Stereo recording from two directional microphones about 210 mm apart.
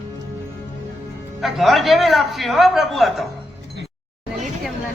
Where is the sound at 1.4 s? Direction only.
Centre (ahead or behind).